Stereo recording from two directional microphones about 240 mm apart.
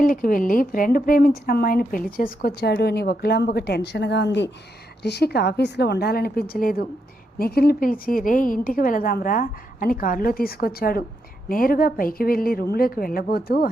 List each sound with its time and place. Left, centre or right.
0.0 s a woman's voice: left